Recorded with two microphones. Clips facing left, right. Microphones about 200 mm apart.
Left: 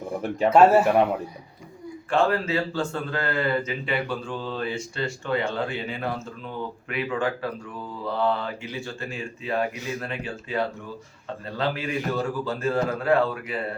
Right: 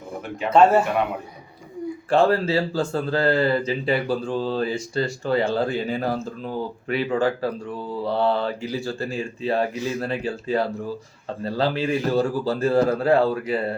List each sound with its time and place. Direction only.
0.5 s speech: 5° left (ahead or behind)
2.0 s speech: 35° right (ahead or behind)